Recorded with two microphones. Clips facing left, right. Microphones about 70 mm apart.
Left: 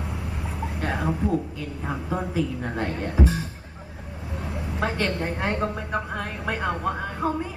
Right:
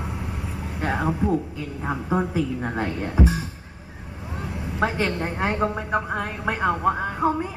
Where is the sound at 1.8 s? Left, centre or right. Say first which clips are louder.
Right 5 dB; right.